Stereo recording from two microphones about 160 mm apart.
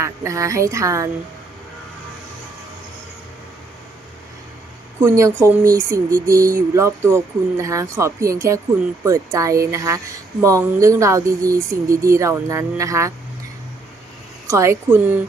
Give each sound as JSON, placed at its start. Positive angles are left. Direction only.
{"t": 0.0, "sound": "speech", "side_deg": -20}
{"t": 4.9, "sound": "speech", "side_deg": -20}
{"t": 14.4, "sound": "a woman's voice", "side_deg": -20}